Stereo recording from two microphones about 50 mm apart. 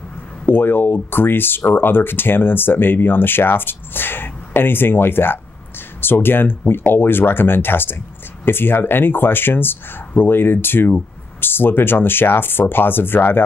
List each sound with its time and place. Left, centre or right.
0.5 s speech: left